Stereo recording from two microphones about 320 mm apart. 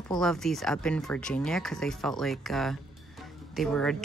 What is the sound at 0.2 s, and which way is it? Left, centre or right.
Speech, centre.